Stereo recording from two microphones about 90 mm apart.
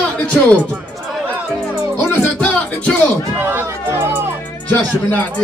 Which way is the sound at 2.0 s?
15° left (ahead or behind).